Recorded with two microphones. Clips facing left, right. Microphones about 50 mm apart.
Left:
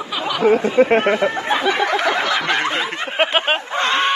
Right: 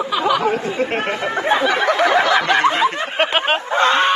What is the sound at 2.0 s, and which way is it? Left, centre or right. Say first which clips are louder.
Snicker: right 4 dB; centre.